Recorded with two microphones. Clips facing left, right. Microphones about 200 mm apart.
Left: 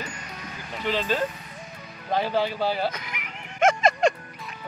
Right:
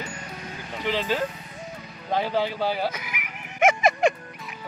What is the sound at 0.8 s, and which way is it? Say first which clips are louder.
Speech: even; 15° right (ahead or behind).